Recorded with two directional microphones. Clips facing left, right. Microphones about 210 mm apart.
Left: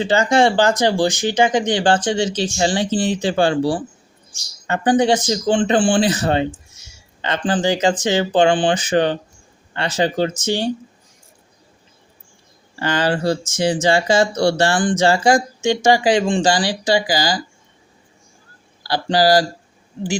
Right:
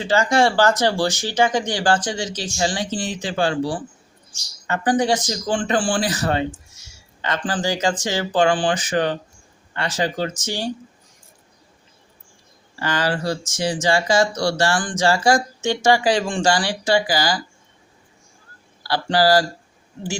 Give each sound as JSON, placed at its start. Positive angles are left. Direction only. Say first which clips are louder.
{"t": 0.0, "sound": "speech", "louder": "left 3 dB", "side_deg": 25}
{"t": 12.8, "sound": "speech", "louder": "left 4 dB", "side_deg": 25}
{"t": 18.8, "sound": "a sound", "louder": "left 1 dB", "side_deg": 15}
{"t": 19.1, "sound": "speech", "louder": "left 2 dB", "side_deg": 15}